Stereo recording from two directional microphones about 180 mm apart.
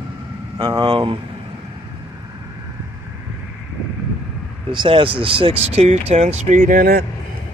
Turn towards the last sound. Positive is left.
turn(degrees=-50)  # may be behind; listen again after turning